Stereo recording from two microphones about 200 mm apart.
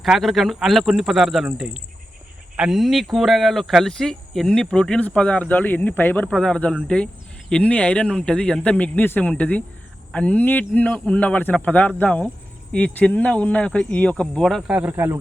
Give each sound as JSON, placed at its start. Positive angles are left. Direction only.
{"t": 0.0, "sound": "speech", "side_deg": 0}